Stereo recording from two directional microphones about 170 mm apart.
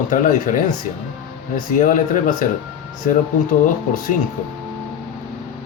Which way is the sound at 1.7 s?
50° left (ahead or behind).